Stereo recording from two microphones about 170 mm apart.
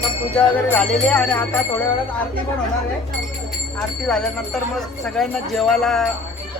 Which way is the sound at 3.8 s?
5° left (ahead or behind).